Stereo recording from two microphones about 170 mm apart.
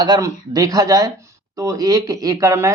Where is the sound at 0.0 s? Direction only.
25° right (ahead or behind).